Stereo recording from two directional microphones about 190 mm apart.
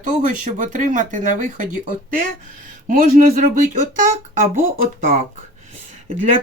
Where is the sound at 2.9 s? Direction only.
40° right (ahead or behind).